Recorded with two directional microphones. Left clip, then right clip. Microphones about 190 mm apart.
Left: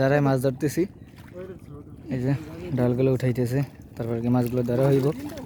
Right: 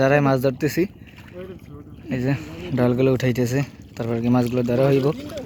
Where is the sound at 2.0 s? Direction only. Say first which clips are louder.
Right 4 dB; 5° left (ahead or behind).